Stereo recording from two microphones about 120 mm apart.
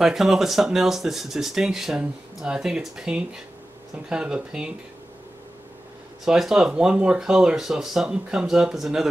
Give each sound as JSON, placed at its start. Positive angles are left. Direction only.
{"t": 0.0, "sound": "speech", "side_deg": -5}
{"t": 6.2, "sound": "speech", "side_deg": -5}